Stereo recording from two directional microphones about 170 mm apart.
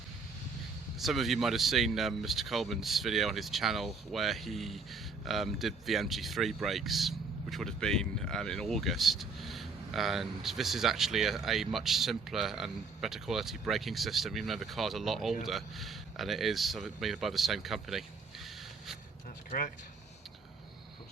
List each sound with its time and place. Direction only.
0.9 s speech: centre (ahead or behind)
19.5 s speech: 50° left (ahead or behind)